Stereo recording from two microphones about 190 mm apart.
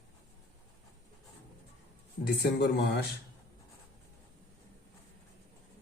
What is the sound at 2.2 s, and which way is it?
Speech, 60° left (ahead or behind).